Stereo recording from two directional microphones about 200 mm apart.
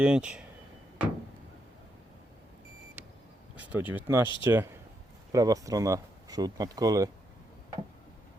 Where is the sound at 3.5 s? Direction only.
10° right (ahead or behind).